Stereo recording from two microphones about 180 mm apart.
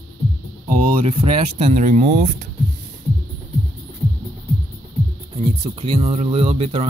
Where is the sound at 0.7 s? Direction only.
45° right (ahead or behind).